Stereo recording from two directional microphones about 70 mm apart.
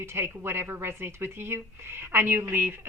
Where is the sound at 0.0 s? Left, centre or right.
Right.